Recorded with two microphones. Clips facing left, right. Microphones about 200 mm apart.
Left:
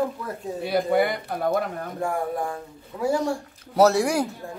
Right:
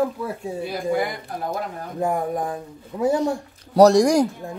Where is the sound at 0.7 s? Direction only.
65° left (ahead or behind).